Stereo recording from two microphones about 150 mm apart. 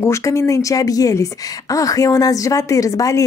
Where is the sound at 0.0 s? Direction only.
20° left (ahead or behind).